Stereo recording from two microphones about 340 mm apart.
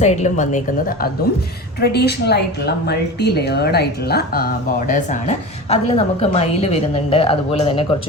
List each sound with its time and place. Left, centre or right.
0.0 s a woman's voice: left